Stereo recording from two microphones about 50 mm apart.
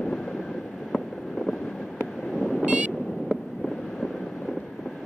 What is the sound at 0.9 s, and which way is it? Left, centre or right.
Vehicle, centre.